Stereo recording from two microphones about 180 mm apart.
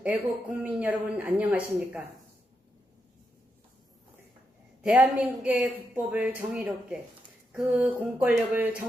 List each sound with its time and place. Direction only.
0.0 s speech: 10° right (ahead or behind)
4.8 s speech: 5° right (ahead or behind)